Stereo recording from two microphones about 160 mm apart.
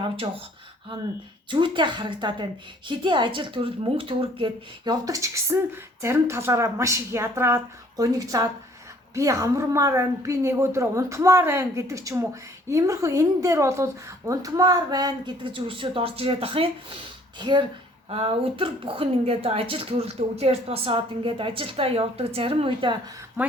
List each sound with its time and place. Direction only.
1.5 s a woman's voice: 30° right (ahead or behind)